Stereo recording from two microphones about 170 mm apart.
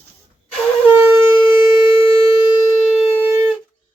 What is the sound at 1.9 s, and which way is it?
Siren, 30° left (ahead or behind).